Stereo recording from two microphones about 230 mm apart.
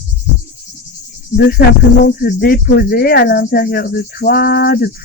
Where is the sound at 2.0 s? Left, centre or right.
Left.